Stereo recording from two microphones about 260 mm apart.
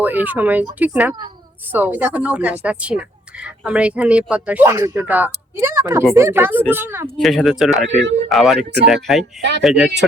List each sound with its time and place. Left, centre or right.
0.0 s a woman's voice: centre
7.9 s speech: right
8.3 s a woman's voice: centre
8.5 s speech: right
9.1 s a woman's voice: centre